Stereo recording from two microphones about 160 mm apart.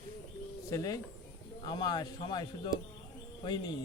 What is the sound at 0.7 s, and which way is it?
Speech, 20° left (ahead or behind).